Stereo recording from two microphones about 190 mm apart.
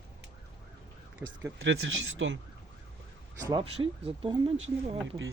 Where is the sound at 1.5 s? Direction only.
90° right.